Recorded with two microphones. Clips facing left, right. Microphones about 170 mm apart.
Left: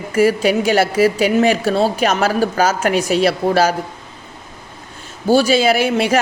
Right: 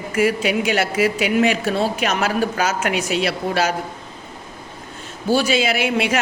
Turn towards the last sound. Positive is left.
turn(degrees=35)  # may be behind; listen again after turning